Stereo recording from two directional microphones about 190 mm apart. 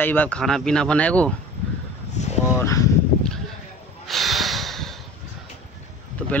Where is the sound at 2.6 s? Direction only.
15° left (ahead or behind).